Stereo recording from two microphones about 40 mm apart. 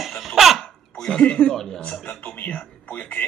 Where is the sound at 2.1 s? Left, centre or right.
Left.